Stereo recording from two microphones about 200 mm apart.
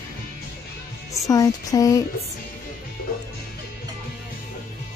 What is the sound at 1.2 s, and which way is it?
Speech, 15° left (ahead or behind).